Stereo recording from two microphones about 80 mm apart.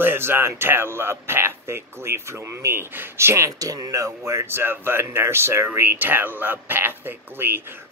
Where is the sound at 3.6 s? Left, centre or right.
Right.